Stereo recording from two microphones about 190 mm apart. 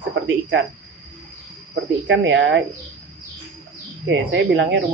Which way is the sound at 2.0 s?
80° right.